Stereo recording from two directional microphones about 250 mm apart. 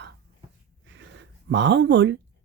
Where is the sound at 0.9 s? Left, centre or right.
Right.